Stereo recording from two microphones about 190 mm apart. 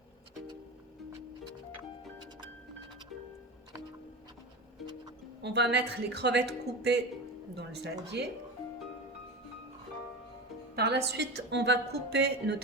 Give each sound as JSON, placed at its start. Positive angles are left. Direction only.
{"t": 5.4, "sound": "a woman's voice", "side_deg": -65}
{"t": 10.8, "sound": "a woman's voice", "side_deg": -60}